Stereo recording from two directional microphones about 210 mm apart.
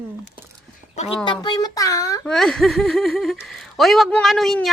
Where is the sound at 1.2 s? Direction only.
20° left (ahead or behind).